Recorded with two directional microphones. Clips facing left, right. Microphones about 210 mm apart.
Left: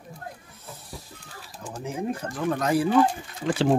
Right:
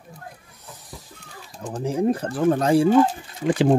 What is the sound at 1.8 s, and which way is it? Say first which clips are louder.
Speech: right 8 dB; 35° right (ahead or behind).